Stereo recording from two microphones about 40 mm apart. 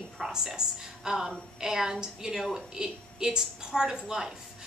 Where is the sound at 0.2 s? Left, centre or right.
Centre.